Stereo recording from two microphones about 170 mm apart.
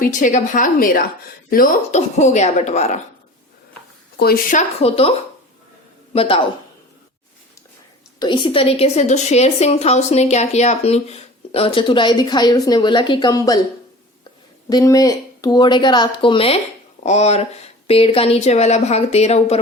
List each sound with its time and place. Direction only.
0.0 s a woman's voice: 50° left (ahead or behind)
4.5 s a woman's voice: 35° left (ahead or behind)
6.1 s a woman's voice: 30° left (ahead or behind)
8.2 s a woman's voice: 25° left (ahead or behind)
14.7 s a woman's voice: 20° left (ahead or behind); by 19.5 s 40° left (ahead or behind)